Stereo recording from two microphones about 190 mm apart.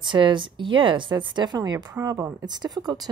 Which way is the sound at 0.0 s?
25° right (ahead or behind).